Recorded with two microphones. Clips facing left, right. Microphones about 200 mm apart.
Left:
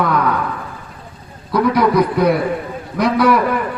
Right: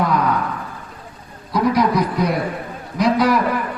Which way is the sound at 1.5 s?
60° left (ahead or behind).